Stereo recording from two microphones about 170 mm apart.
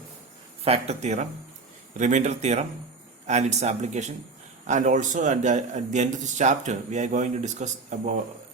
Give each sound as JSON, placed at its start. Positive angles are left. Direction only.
{"t": 0.6, "sound": "a man's voice", "side_deg": -40}